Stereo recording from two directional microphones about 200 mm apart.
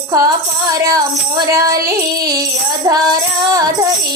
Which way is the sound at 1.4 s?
15° right (ahead or behind).